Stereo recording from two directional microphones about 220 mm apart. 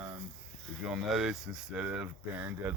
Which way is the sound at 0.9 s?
5° right (ahead or behind).